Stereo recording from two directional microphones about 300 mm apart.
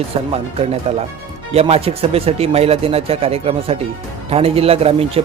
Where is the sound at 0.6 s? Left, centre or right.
Centre.